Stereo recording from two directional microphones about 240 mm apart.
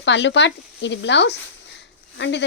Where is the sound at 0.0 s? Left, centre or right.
Left.